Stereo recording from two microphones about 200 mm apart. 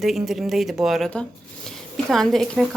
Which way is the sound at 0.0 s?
Centre (ahead or behind).